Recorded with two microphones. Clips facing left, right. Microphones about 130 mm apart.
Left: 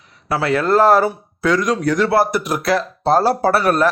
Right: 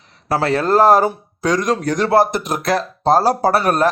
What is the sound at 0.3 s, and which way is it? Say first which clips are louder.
Speech: even; 40° right (ahead or behind).